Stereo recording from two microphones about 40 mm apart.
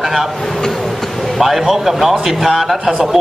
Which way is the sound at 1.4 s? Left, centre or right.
Centre.